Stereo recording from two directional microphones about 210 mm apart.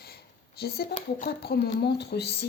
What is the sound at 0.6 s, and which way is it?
Speech, 45° left (ahead or behind).